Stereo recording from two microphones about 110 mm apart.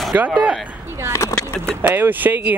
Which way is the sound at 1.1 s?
25° left (ahead or behind).